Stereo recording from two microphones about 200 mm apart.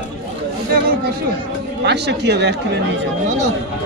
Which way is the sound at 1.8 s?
55° right (ahead or behind).